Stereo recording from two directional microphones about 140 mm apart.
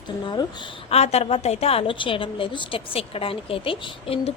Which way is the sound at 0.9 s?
50° left (ahead or behind).